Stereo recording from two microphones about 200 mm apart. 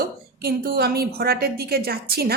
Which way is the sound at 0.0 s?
50° right (ahead or behind).